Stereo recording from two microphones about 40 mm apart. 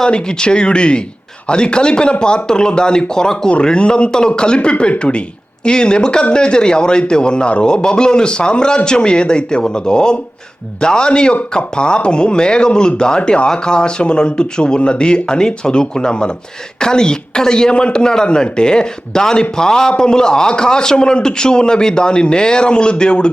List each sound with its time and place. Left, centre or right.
0.0 s a man's voice: centre